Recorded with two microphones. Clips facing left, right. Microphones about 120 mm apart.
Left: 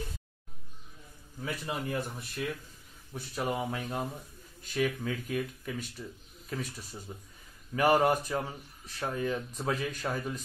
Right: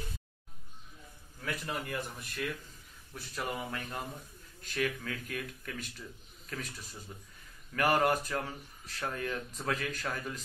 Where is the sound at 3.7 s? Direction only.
15° left (ahead or behind).